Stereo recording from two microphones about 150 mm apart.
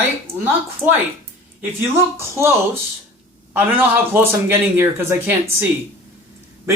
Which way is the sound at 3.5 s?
15° right (ahead or behind).